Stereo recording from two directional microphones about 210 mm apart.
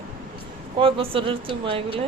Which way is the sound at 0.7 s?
25° right (ahead or behind).